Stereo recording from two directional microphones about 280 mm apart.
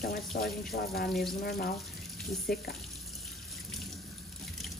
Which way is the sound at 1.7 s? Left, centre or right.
Centre.